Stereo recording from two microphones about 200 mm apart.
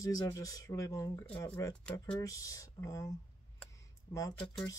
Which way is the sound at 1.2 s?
5° left (ahead or behind).